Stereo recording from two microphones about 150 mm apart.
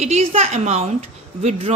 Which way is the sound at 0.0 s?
45° right (ahead or behind).